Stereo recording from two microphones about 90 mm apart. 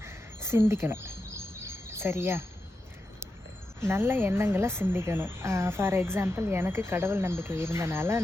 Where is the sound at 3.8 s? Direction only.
30° right (ahead or behind).